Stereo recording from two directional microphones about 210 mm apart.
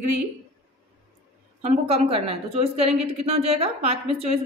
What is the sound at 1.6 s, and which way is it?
A woman's voice, 30° right (ahead or behind).